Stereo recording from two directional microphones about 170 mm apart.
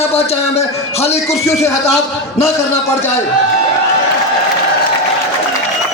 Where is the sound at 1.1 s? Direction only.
15° left (ahead or behind).